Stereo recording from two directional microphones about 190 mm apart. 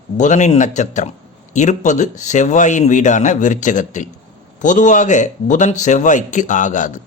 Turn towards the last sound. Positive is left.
turn(degrees=40)  # may be behind; listen again after turning